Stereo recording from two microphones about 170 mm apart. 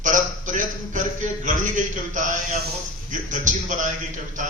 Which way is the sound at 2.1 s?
45° right (ahead or behind).